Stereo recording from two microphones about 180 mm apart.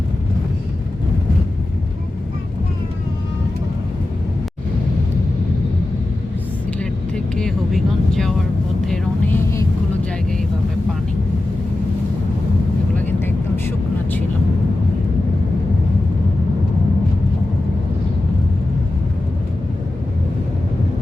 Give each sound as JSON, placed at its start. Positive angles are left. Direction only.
{"t": 7.3, "sound": "vehicle", "side_deg": 5}